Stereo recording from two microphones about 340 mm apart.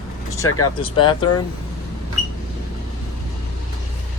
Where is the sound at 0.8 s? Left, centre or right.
Centre.